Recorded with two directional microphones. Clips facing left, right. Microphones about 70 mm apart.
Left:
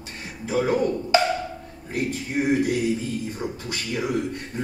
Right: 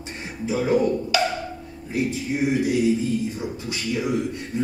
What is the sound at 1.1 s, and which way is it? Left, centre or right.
Wood block, left.